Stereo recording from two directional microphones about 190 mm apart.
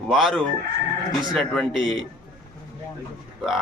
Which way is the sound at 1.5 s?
Centre (ahead or behind).